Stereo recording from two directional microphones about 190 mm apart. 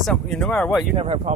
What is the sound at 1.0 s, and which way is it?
Speech, 30° right (ahead or behind).